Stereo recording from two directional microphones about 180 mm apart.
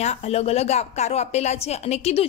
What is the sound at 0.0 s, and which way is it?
A woman's voice, 35° left (ahead or behind).